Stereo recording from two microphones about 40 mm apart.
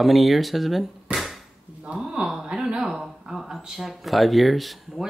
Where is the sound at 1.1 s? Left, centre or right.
Centre.